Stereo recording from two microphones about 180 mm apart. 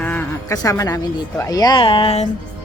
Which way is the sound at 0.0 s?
10° left (ahead or behind).